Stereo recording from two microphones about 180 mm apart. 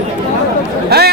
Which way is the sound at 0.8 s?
65° right (ahead or behind).